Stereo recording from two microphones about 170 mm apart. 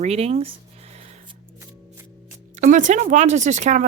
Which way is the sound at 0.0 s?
40° right (ahead or behind).